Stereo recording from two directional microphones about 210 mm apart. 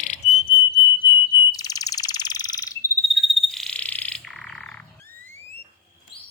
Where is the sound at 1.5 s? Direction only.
15° left (ahead or behind).